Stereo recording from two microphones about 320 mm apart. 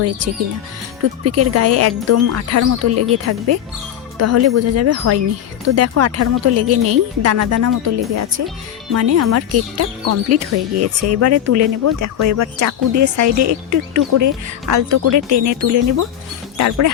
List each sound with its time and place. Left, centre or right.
1.2 s speech: right